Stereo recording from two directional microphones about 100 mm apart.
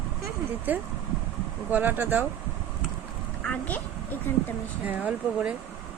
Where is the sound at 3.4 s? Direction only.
15° left (ahead or behind).